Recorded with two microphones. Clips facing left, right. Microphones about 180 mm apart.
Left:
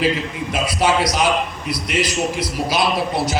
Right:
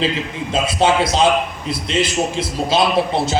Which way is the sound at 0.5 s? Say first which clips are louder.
Right 3 dB; 25° right (ahead or behind).